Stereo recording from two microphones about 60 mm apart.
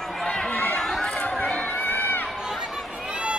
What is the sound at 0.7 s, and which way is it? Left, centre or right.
Chatter, centre.